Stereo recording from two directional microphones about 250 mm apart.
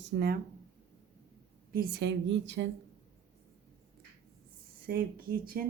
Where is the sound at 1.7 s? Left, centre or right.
Right.